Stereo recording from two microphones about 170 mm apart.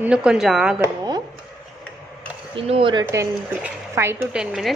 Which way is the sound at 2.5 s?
30° right (ahead or behind).